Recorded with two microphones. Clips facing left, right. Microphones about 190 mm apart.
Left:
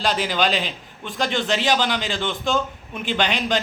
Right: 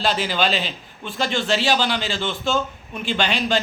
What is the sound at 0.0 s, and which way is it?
A man's voice, 15° left (ahead or behind).